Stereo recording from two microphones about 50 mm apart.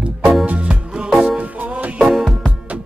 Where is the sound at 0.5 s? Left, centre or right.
Right.